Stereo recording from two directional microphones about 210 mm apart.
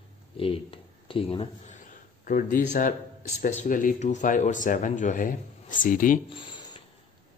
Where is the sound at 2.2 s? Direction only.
40° left (ahead or behind).